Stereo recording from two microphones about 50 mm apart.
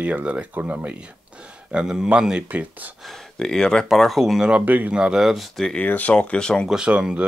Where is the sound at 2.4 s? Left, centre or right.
Right.